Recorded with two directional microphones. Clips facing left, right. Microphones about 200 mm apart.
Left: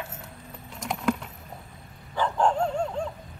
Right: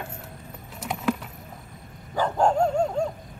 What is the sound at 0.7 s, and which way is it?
Keys jangling, 5° right (ahead or behind).